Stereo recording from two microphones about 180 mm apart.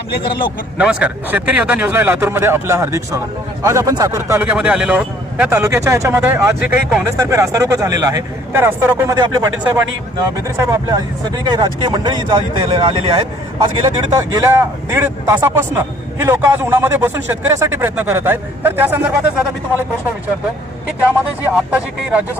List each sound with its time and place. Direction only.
0.8 s a man's voice: 5° right (ahead or behind)
21.4 s a man's voice: 10° right (ahead or behind)